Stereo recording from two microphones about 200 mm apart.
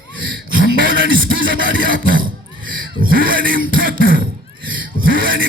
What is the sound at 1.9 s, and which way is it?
Music, 45° right (ahead or behind).